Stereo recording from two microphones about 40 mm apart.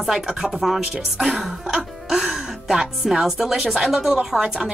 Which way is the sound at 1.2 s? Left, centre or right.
Centre.